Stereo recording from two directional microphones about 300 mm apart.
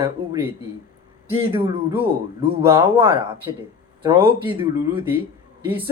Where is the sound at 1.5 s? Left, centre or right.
Centre.